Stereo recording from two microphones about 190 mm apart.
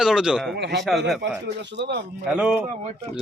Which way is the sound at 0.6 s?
65° right (ahead or behind).